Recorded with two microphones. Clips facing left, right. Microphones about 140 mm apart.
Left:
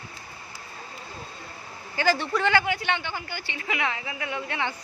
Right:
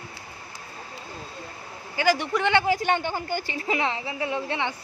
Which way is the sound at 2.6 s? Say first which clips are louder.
Right 5 dB; 40° right (ahead or behind).